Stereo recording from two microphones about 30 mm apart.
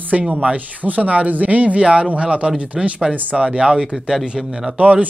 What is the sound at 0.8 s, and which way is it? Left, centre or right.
Speech, right.